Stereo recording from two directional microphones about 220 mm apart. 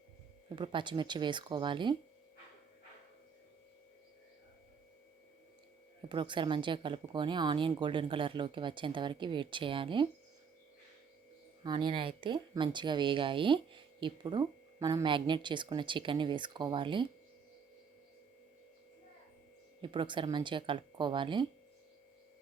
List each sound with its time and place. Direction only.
0.5 s speech: 20° right (ahead or behind)
6.1 s speech: 20° right (ahead or behind)
11.6 s speech: 20° right (ahead or behind)
19.8 s speech: 20° right (ahead or behind)